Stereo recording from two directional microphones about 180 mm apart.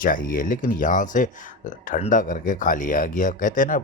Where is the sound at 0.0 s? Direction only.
50° left (ahead or behind).